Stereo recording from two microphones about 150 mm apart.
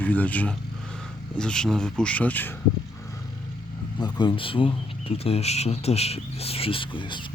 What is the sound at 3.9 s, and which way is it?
Speech, 30° left (ahead or behind).